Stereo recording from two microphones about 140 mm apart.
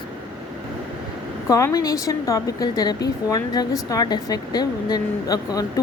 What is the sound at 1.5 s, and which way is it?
A woman's voice, 25° left (ahead or behind).